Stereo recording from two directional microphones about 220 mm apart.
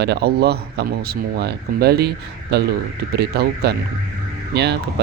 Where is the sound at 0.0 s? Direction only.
50° right (ahead or behind).